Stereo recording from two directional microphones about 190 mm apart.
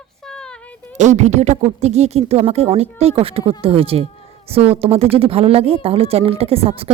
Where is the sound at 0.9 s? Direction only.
40° right (ahead or behind).